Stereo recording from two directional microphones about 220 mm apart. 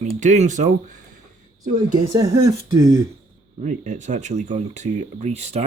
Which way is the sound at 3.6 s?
30° right (ahead or behind).